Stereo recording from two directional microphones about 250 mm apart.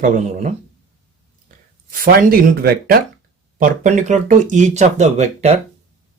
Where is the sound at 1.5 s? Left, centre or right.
Right.